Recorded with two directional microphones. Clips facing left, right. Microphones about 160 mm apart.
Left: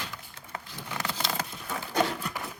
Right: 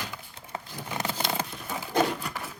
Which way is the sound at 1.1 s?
55° right (ahead or behind).